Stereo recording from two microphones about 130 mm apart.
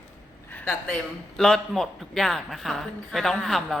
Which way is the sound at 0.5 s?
15° left (ahead or behind).